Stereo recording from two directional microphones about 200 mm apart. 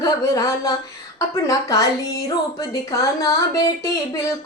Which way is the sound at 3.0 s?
20° left (ahead or behind).